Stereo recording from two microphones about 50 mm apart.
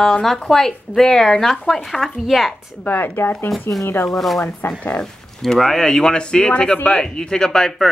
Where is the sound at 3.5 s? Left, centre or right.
Centre.